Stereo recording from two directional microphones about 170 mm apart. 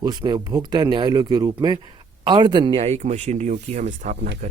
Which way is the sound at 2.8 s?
40° right (ahead or behind).